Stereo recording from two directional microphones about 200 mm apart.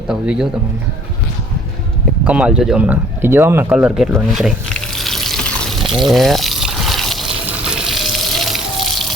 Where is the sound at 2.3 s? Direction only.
5° right (ahead or behind).